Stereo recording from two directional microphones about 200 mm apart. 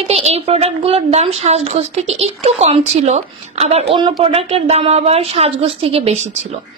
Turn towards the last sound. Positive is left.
turn(degrees=-35)  # may be behind; listen again after turning